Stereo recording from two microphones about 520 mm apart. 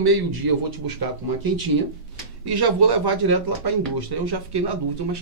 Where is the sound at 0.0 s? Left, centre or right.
Right.